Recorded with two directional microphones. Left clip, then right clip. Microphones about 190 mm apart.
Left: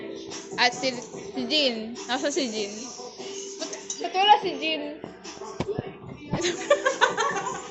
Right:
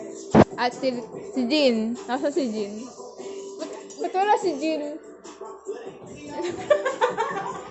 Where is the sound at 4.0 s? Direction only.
55° right (ahead or behind).